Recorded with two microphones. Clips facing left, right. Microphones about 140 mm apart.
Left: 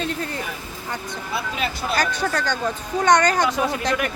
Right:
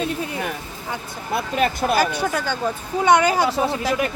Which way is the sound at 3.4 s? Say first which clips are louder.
Right 1 dB; 30° right (ahead or behind).